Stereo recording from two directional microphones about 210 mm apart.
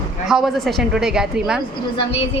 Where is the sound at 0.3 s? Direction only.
Centre (ahead or behind).